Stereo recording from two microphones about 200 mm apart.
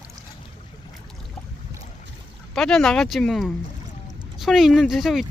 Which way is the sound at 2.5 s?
Centre (ahead or behind).